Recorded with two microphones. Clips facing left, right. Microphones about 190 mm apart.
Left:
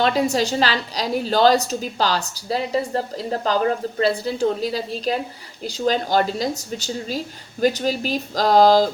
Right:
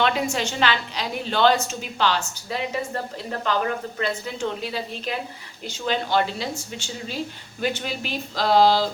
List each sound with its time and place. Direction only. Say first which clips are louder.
0.0 s a woman's voice: left 4 dB; 35° left (ahead or behind)